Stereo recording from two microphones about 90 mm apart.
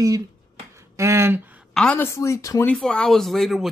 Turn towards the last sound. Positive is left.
turn(degrees=0)  # may be behind; listen again after turning